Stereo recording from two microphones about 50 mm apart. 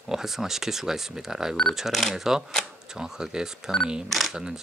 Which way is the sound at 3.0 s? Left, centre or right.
Centre.